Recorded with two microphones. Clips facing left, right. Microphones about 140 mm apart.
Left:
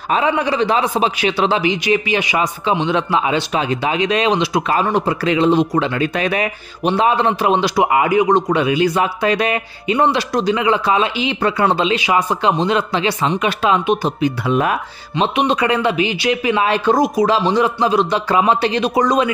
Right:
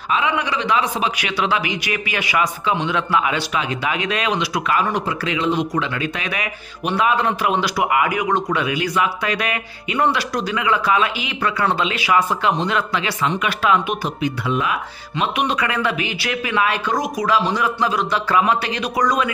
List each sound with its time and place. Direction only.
0.1 s a man's voice: 35° left (ahead or behind)
14.5 s speech: 45° left (ahead or behind)
15.1 s a man's voice: 25° left (ahead or behind)